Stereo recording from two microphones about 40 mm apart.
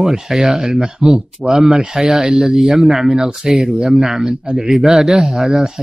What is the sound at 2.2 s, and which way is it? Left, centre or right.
Speech, right.